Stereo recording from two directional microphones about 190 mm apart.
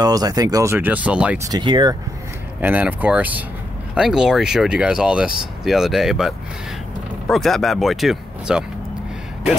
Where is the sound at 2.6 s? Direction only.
10° right (ahead or behind).